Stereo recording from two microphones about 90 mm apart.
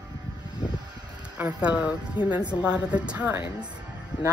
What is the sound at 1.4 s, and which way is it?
Speech, 15° right (ahead or behind).